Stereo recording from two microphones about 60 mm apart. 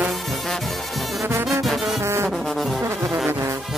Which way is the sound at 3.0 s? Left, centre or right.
Centre.